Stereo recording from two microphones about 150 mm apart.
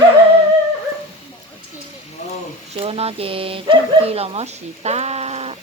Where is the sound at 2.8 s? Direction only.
40° right (ahead or behind).